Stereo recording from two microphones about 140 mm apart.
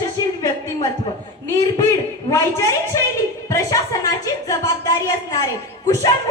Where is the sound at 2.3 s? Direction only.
25° left (ahead or behind).